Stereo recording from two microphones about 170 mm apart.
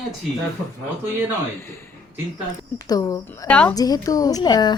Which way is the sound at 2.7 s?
20° left (ahead or behind).